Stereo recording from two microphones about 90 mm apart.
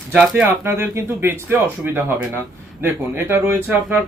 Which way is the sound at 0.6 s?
25° right (ahead or behind).